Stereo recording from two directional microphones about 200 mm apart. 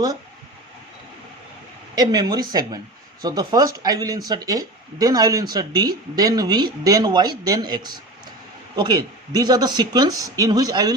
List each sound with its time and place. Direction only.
2.0 s speech: 20° right (ahead or behind)